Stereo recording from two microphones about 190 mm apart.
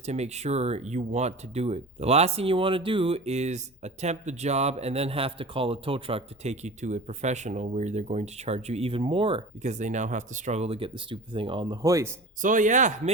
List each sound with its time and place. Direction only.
0.0 s speech: 35° right (ahead or behind); by 12.1 s 15° right (ahead or behind)
12.4 s speech: 40° right (ahead or behind)